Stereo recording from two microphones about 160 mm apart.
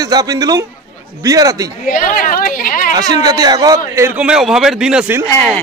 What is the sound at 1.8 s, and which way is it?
A woman's voice, 60° left (ahead or behind).